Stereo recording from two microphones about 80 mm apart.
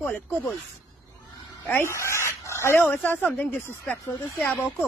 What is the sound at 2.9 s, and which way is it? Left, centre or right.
Speech, left.